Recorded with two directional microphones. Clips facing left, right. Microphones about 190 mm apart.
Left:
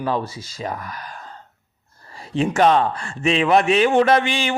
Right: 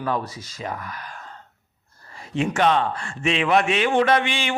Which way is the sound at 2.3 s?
35° left (ahead or behind).